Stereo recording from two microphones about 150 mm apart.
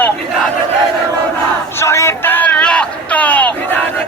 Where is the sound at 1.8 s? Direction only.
20° left (ahead or behind).